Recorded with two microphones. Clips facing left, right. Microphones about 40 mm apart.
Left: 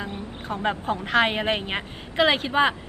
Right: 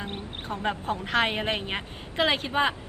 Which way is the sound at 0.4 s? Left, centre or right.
Left.